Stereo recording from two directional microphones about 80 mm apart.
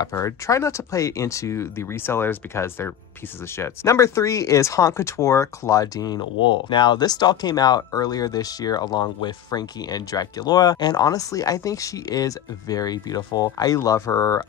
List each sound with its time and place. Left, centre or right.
0.2 s speech: left
6.4 s speech: left